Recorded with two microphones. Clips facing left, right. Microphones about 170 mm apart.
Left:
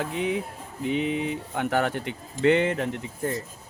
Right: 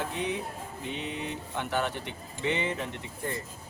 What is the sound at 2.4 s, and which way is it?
Speech, 65° left (ahead or behind).